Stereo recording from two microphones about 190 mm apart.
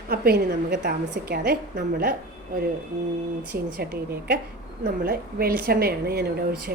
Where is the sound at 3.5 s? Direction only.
55° right (ahead or behind).